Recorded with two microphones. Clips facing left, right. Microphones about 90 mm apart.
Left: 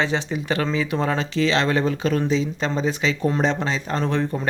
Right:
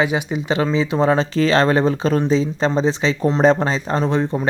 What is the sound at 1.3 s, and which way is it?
Speech, 45° right (ahead or behind).